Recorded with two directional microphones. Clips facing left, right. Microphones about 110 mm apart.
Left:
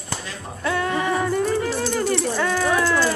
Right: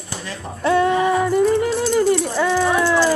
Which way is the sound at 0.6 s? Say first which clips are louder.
Right 7 dB; 20° right (ahead or behind).